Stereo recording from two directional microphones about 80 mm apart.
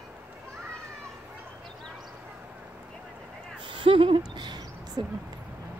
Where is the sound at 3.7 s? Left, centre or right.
Right.